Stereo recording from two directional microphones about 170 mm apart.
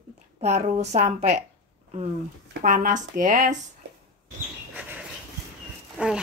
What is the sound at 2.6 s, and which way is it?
Speech, 50° right (ahead or behind).